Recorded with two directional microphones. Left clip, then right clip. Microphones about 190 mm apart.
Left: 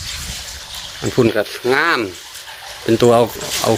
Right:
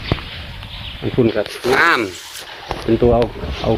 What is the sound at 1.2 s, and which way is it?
Speech, 20° left (ahead or behind).